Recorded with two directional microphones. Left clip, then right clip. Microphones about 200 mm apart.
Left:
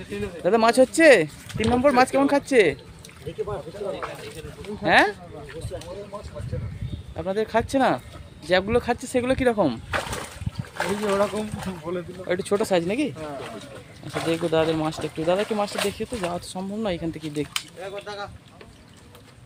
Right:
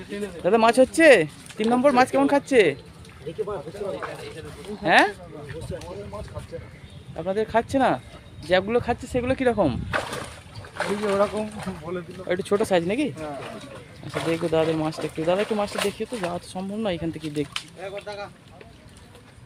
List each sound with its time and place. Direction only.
0.4 s speech: centre (ahead or behind)
7.2 s speech: 5° left (ahead or behind)
10.8 s speech: 20° left (ahead or behind)
12.3 s speech: 5° left (ahead or behind)
17.5 s speech: 50° left (ahead or behind)